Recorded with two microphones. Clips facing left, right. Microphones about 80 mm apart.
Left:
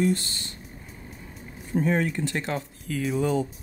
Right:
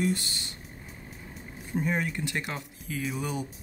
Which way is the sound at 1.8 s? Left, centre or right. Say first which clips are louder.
Left 5 dB; centre.